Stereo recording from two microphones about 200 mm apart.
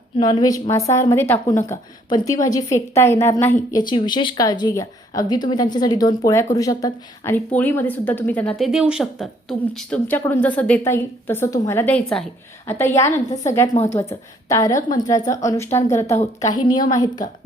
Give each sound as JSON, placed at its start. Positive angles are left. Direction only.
{"t": 0.2, "sound": "a woman's voice", "side_deg": 20}